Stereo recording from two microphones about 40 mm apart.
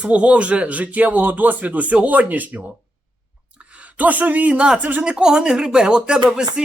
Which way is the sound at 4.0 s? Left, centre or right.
Right.